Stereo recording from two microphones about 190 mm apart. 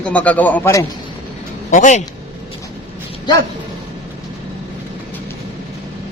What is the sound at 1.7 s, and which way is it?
Speech, 40° left (ahead or behind).